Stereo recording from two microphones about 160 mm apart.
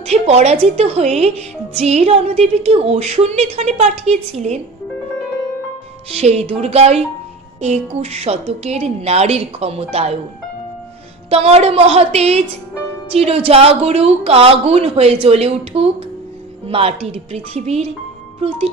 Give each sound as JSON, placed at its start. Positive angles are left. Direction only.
{"t": 0.0, "sound": "a woman's voice", "side_deg": -40}
{"t": 6.1, "sound": "a woman's voice", "side_deg": -40}
{"t": 11.2, "sound": "a woman's voice", "side_deg": -40}